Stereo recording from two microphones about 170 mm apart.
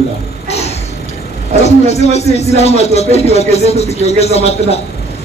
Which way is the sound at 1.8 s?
40° left (ahead or behind).